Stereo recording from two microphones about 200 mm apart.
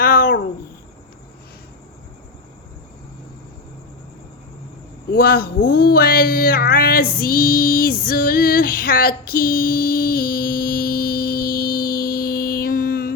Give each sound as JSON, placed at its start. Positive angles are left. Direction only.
{"t": 0.0, "sound": "cat", "side_deg": 45}
{"t": 5.1, "sound": "speech", "side_deg": 50}